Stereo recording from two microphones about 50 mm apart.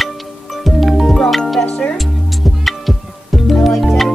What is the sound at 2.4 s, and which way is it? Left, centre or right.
Music, centre.